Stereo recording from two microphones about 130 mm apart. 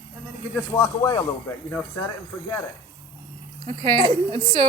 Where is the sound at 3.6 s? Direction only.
45° right (ahead or behind).